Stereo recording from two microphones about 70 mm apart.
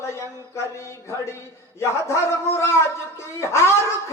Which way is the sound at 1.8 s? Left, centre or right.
Left.